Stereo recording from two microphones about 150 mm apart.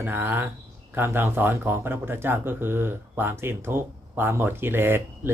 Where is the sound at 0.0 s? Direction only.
15° right (ahead or behind).